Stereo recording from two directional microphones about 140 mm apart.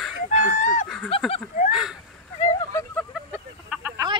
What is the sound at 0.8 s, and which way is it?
Snicker, 5° left (ahead or behind).